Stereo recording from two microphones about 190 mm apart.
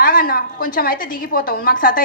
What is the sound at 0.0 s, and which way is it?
A woman's voice, 45° left (ahead or behind).